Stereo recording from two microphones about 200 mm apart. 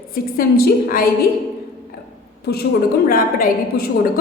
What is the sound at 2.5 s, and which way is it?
A woman's voice, 55° left (ahead or behind).